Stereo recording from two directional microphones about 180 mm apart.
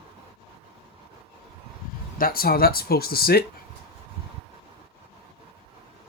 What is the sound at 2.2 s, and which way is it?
Speech, 55° left (ahead or behind).